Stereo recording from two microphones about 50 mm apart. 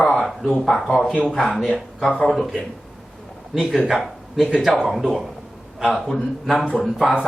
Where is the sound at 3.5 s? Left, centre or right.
Centre.